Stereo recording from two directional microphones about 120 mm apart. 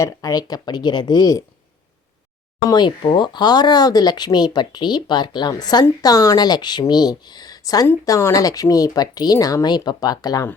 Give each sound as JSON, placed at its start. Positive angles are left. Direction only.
{"t": 0.0, "sound": "speech", "side_deg": 30}
{"t": 2.6, "sound": "speech", "side_deg": 40}